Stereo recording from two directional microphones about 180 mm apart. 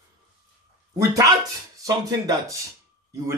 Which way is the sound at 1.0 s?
20° right (ahead or behind).